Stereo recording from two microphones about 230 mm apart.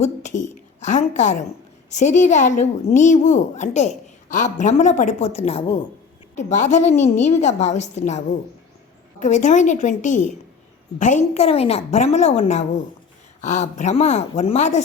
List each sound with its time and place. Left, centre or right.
0.0 s a woman's voice: left
9.2 s a woman's voice: left